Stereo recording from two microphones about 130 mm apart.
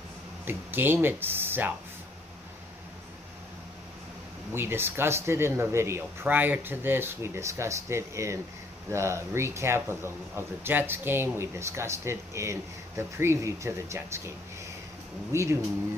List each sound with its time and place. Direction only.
0.5 s speech: 15° right (ahead or behind)
4.6 s speech: 15° right (ahead or behind)
15.3 s speech: 20° right (ahead or behind)